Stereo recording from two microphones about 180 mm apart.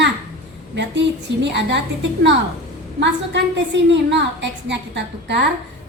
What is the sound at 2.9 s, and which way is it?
A woman's voice, 75° right (ahead or behind).